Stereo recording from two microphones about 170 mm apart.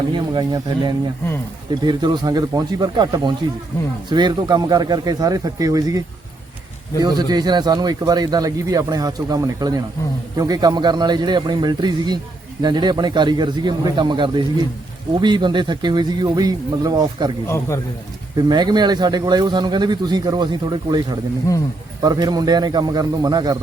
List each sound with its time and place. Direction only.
0.1 s speech: 25° right (ahead or behind)
7.0 s speech: 25° right (ahead or behind)
17.4 s a man's voice: 15° left (ahead or behind)
18.3 s speech: 25° right (ahead or behind)
22.0 s speech: 25° right (ahead or behind)